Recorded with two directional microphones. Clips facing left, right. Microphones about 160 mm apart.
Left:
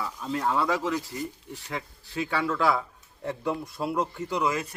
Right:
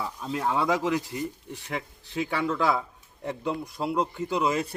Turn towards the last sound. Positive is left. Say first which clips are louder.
# right 2 dB
turn(degrees=-30)  # may be behind; listen again after turning